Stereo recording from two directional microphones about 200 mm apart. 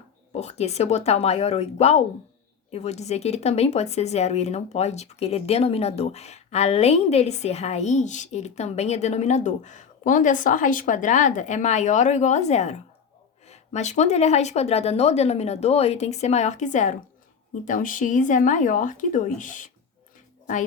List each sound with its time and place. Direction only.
0.3 s speech: 35° left (ahead or behind)